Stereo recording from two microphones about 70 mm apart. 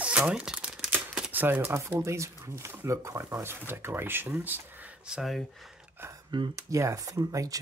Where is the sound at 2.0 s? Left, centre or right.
Right.